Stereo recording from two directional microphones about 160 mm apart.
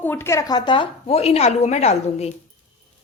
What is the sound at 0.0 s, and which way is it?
Speech, 15° left (ahead or behind).